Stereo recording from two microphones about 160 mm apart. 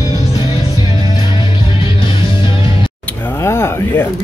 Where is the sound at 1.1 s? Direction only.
30° left (ahead or behind).